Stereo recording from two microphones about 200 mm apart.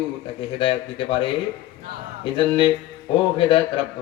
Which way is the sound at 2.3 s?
25° left (ahead or behind).